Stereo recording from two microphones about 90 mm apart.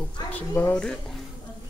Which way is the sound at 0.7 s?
10° left (ahead or behind).